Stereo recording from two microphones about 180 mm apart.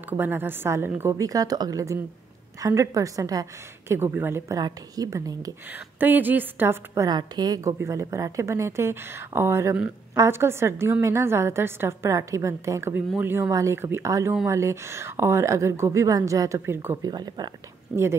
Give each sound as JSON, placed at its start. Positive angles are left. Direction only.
{"t": 0.2, "sound": "a woman's voice", "side_deg": -10}